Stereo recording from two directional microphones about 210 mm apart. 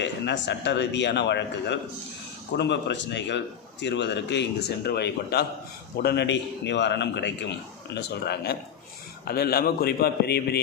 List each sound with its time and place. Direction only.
0.0 s a man's voice: 55° left (ahead or behind)